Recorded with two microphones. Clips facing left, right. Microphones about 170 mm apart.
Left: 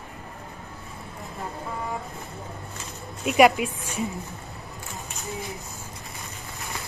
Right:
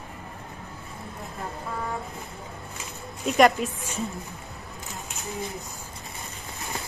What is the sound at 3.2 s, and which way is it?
Speech, 10° left (ahead or behind).